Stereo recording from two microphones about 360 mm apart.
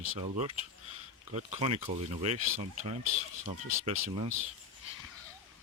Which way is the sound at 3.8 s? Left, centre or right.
Centre.